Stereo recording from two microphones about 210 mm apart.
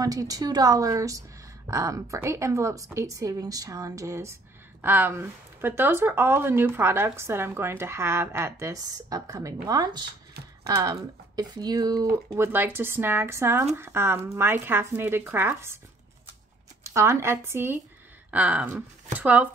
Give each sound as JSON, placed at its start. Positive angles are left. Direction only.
{"t": 0.0, "sound": "speech", "side_deg": -15}
{"t": 16.8, "sound": "speech", "side_deg": -15}